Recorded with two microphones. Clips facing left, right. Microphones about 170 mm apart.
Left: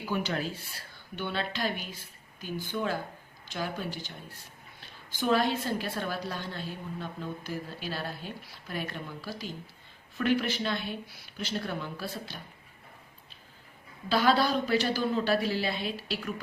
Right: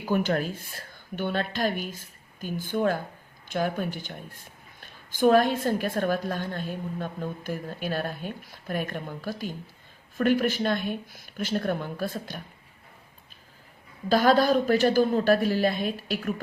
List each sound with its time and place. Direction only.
0.0 s a woman's voice: 50° right (ahead or behind)
14.1 s a woman's voice: 45° right (ahead or behind)